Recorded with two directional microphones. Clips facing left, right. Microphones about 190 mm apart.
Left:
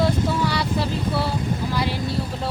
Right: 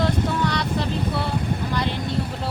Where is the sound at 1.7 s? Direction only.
5° left (ahead or behind).